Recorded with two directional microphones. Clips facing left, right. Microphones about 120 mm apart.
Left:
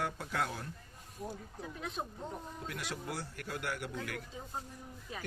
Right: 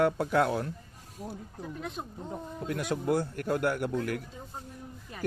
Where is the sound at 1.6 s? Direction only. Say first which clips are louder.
Right 5 dB; centre (ahead or behind).